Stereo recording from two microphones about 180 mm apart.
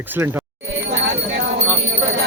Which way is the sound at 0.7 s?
70° right (ahead or behind).